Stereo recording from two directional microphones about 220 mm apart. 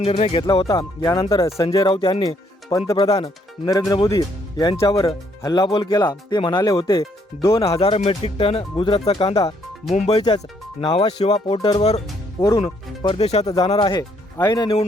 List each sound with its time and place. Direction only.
0.0 s speech: 25° left (ahead or behind)
12.4 s speech: 15° left (ahead or behind)
13.4 s speech: 15° left (ahead or behind)